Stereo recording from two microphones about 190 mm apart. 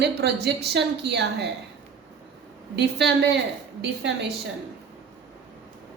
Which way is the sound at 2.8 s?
65° right (ahead or behind).